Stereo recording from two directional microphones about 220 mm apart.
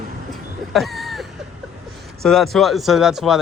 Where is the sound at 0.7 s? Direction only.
Centre (ahead or behind).